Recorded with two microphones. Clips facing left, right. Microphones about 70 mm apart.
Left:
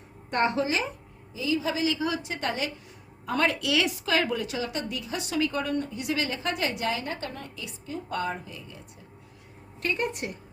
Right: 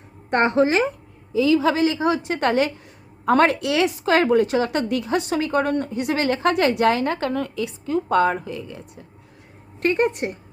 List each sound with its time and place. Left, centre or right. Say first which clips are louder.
0.3 s a woman's voice: right 8 dB; right
1.3 s a woman's voice: right 10 dB; right
1.8 s a woman's voice: right 8 dB; right
9.8 s a woman's voice: right 9 dB; right